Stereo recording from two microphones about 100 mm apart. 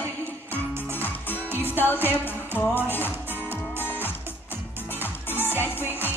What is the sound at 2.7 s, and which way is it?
Music, 20° left (ahead or behind).